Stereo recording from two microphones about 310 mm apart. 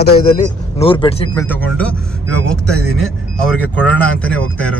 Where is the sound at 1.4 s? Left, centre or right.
Centre.